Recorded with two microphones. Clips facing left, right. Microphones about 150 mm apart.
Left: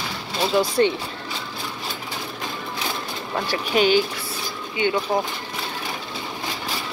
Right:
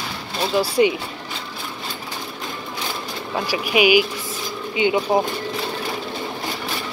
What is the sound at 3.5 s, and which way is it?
Speech, 10° right (ahead or behind).